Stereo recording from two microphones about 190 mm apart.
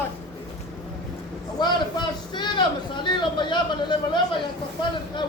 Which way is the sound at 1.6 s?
25° left (ahead or behind).